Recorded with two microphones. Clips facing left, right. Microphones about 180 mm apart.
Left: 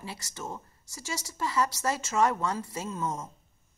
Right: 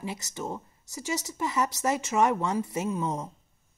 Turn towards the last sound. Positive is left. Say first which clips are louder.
# right 4 dB
turn(degrees=-15)  # may be behind; listen again after turning